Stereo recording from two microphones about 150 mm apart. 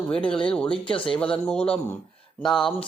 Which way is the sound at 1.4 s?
10° left (ahead or behind).